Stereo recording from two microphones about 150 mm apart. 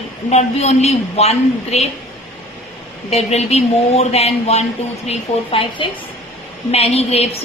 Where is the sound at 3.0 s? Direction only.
45° left (ahead or behind).